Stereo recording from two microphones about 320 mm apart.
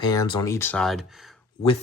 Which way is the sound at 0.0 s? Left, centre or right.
Centre.